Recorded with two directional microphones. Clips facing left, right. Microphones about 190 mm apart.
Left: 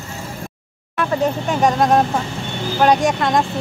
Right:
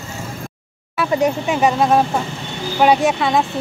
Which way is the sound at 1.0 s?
10° right (ahead or behind).